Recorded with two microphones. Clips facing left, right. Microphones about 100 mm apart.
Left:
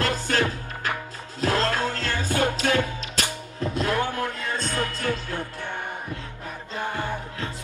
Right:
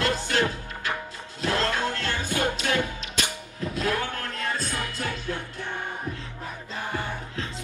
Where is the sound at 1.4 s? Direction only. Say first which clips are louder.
Left 2 dB; 40° left (ahead or behind).